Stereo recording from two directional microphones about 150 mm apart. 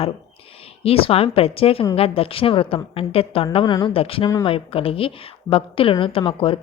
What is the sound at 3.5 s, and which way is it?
Speech, 30° left (ahead or behind).